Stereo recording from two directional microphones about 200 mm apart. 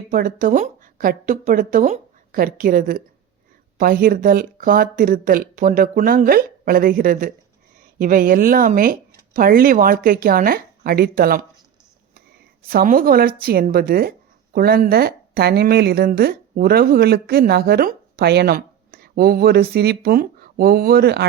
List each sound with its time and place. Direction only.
0.1 s speech: 45° right (ahead or behind)
12.6 s a woman's voice: 45° right (ahead or behind)